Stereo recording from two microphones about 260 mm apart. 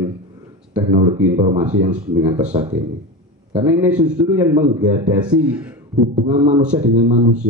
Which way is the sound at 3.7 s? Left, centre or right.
Centre.